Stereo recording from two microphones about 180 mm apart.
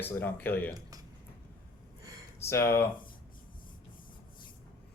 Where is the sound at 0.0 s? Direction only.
10° left (ahead or behind).